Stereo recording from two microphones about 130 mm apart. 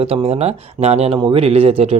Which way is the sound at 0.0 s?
45° right (ahead or behind).